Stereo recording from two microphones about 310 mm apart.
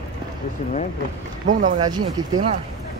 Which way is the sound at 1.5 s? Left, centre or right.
Right.